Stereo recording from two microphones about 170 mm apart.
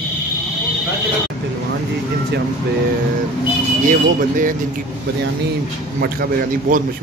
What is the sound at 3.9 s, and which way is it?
Speech, 50° right (ahead or behind).